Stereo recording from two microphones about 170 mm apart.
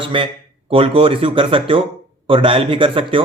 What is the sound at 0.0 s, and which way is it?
A man's voice, 30° right (ahead or behind).